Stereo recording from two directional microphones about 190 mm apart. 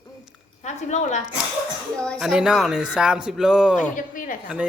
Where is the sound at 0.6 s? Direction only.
40° left (ahead or behind).